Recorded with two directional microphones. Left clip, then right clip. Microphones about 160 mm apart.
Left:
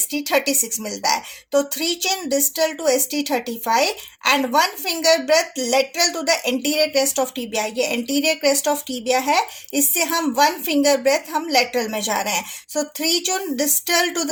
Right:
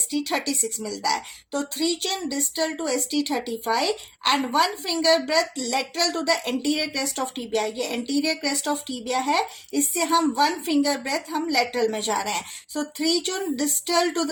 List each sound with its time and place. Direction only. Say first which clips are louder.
0.1 s a woman's voice: left 6 dB; 55° left (ahead or behind)